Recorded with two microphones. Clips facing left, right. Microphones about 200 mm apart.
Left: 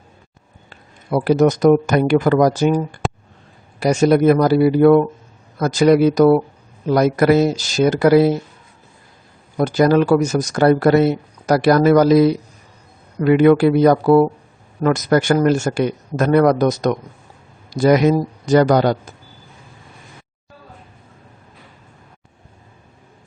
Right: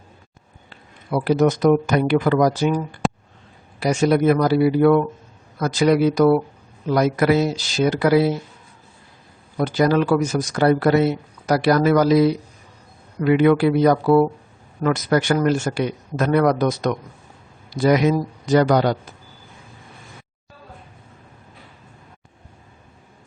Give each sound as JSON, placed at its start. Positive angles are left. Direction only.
{"t": 0.7, "sound": "speech", "side_deg": 45}
{"t": 9.6, "sound": "speech", "side_deg": 45}
{"t": 13.2, "sound": "speech", "side_deg": 45}